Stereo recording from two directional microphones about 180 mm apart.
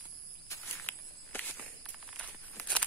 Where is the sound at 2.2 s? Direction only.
10° left (ahead or behind).